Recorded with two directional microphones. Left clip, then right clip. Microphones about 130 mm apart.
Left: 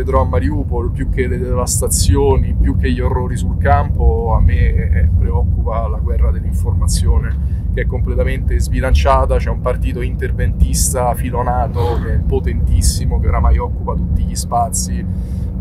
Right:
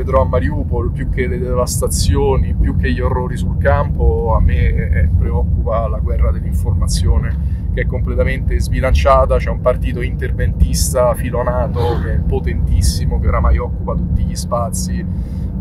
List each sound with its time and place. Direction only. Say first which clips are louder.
0.1 s speech: right 2 dB; 30° left (ahead or behind); by 5.9 s centre (ahead or behind)
7.7 s speech: right 1 dB; 15° left (ahead or behind)